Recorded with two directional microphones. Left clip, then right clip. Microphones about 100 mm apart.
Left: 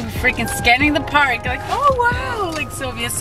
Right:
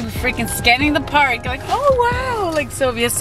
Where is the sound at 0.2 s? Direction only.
15° right (ahead or behind).